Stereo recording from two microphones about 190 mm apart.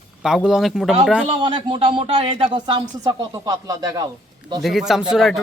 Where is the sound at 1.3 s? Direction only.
25° right (ahead or behind).